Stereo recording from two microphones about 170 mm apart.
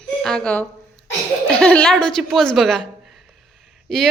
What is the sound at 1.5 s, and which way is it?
Speech, 5° left (ahead or behind).